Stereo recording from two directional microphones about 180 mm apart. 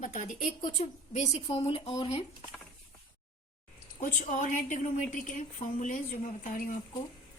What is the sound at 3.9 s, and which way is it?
A woman's voice, 45° left (ahead or behind).